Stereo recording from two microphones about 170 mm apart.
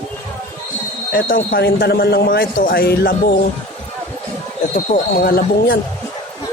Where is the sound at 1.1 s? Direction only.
60° left (ahead or behind).